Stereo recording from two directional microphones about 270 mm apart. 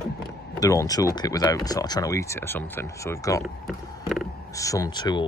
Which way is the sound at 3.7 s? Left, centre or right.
Centre.